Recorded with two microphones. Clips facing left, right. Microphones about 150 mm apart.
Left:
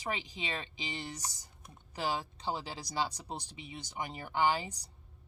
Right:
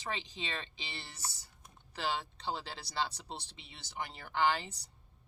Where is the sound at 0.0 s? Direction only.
10° left (ahead or behind).